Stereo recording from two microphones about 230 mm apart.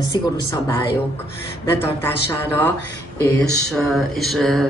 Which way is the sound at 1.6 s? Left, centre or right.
Centre.